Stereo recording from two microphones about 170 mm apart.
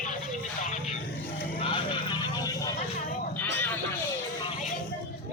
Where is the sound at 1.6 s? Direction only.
30° left (ahead or behind).